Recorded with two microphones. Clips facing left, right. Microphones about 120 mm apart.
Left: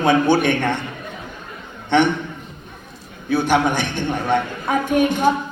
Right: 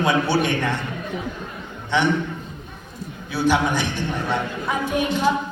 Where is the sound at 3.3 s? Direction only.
55° left (ahead or behind).